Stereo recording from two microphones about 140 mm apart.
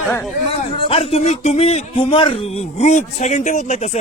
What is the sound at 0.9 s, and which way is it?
A man's voice, 45° left (ahead or behind).